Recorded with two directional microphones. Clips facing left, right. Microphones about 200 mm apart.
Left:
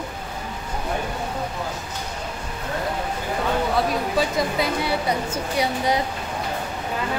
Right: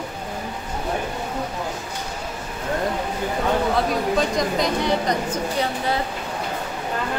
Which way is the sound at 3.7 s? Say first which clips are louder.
Right 1 dB; 5° left (ahead or behind).